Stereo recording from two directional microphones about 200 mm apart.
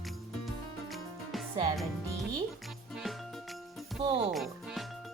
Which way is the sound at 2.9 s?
Centre (ahead or behind).